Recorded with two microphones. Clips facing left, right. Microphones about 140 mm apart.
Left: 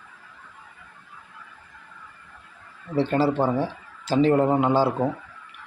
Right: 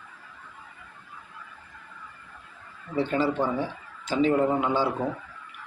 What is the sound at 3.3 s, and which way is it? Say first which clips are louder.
A man's voice: left 4 dB; 35° left (ahead or behind).